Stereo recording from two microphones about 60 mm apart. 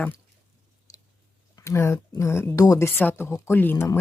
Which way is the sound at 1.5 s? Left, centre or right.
Left.